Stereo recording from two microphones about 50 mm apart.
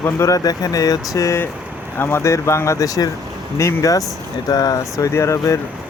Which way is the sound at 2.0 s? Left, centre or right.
Left.